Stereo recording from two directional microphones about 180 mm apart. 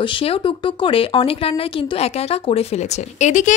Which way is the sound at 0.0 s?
30° left (ahead or behind).